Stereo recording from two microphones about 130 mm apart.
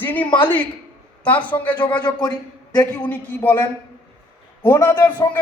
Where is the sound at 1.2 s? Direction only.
10° left (ahead or behind).